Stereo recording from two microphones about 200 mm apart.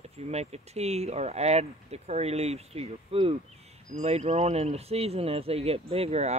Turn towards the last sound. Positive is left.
turn(degrees=-35)  # may be behind; listen again after turning